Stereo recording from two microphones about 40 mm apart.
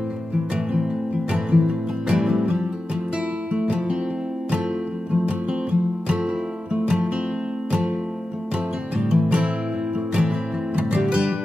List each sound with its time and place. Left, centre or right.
1.3 s music: right
5.2 s music: right
8.9 s music: right
10.9 s music: right